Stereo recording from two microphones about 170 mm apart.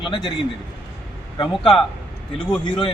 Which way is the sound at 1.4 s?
30° left (ahead or behind).